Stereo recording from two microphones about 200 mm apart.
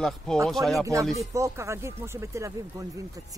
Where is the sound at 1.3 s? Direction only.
15° right (ahead or behind).